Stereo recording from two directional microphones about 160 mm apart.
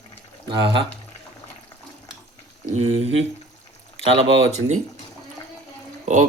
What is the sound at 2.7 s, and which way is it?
Speech, 40° right (ahead or behind).